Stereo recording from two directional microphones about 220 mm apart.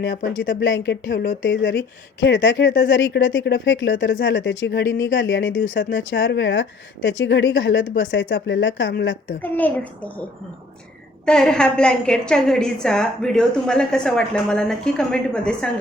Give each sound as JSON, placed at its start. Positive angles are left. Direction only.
{"t": 0.6, "sound": "speech", "side_deg": 55}
{"t": 9.4, "sound": "a child's voice", "side_deg": 5}
{"t": 11.3, "sound": "a woman's voice", "side_deg": 5}